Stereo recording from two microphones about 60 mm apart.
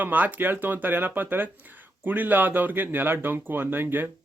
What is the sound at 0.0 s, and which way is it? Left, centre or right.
Speech, right.